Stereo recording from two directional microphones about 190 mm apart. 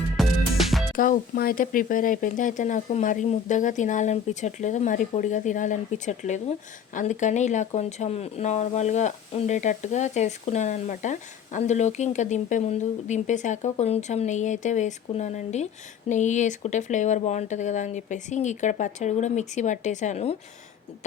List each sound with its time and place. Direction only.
0.2 s music: centre (ahead or behind)
0.9 s speech: 50° left (ahead or behind)